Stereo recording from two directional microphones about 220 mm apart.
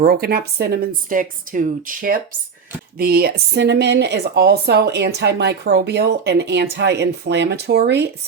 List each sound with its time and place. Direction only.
0.0 s speech: 45° right (ahead or behind)